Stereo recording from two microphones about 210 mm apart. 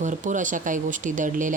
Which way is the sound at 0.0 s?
35° right (ahead or behind).